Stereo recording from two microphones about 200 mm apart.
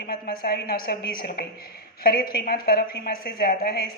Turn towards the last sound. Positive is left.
turn(degrees=50)  # may be behind; listen again after turning